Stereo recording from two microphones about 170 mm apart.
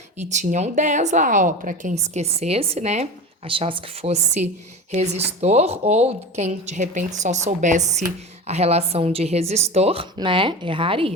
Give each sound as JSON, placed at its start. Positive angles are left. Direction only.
{"t": 0.2, "sound": "speech", "side_deg": -45}
{"t": 2.1, "sound": "speech", "side_deg": -40}